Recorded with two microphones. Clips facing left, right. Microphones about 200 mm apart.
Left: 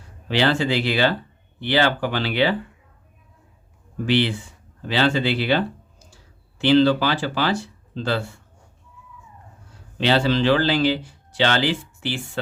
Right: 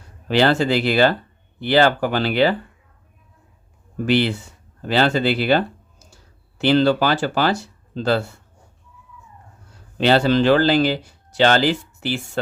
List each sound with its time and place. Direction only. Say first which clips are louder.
0.3 s speech: right 3 dB; 45° right (ahead or behind)
3.9 s speech: right 2 dB; 45° right (ahead or behind)
10.0 s speech: right 3 dB; 45° right (ahead or behind)